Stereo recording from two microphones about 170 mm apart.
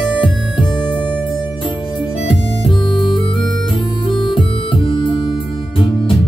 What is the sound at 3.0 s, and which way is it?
Music, 30° left (ahead or behind).